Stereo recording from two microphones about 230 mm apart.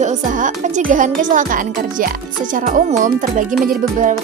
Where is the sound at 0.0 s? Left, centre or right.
Right.